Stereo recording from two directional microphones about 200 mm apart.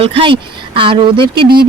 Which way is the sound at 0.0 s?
25° right (ahead or behind).